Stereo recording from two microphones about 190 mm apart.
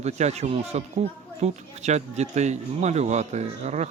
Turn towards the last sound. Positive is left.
turn(degrees=-35)  # may be behind; listen again after turning